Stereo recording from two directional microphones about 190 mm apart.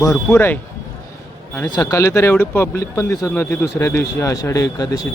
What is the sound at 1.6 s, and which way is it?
Speech, 20° left (ahead or behind).